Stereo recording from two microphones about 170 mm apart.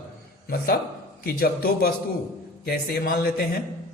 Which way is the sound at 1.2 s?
65° left (ahead or behind).